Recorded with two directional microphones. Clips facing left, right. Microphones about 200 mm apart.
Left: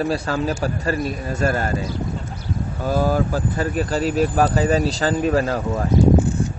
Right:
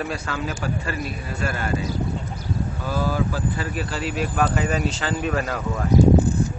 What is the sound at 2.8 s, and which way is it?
Speech, 45° left (ahead or behind).